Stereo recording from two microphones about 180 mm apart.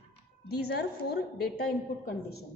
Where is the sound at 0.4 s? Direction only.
60° left (ahead or behind).